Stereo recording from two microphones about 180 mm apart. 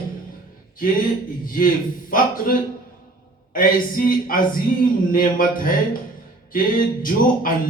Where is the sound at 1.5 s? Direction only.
50° left (ahead or behind).